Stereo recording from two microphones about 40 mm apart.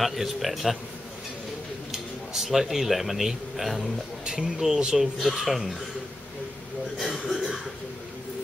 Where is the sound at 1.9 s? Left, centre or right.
Centre.